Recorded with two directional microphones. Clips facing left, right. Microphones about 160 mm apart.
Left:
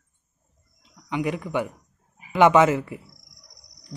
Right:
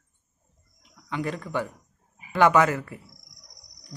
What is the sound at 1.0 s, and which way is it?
Speech, 15° left (ahead or behind).